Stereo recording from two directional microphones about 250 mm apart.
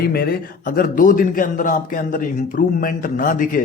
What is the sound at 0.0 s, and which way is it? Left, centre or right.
A man's voice, left.